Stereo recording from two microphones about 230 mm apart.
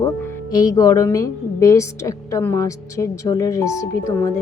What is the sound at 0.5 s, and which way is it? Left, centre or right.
Speech, centre.